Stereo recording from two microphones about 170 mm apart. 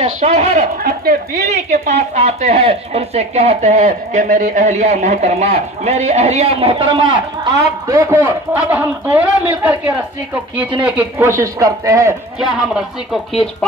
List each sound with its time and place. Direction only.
0.0 s a man's voice: 40° right (ahead or behind); by 9.8 s 10° right (ahead or behind)
10.8 s a man's voice: 10° right (ahead or behind)
12.4 s speech: centre (ahead or behind)